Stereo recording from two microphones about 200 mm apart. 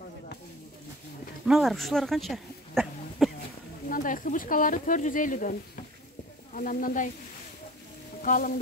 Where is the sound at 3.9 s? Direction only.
45° left (ahead or behind).